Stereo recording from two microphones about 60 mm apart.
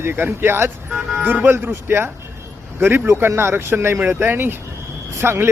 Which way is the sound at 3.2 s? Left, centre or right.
Right.